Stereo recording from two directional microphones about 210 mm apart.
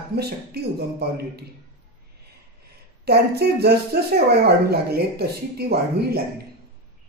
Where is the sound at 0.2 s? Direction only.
50° right (ahead or behind).